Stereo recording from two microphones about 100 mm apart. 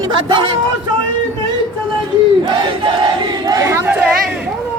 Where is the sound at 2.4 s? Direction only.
55° right (ahead or behind).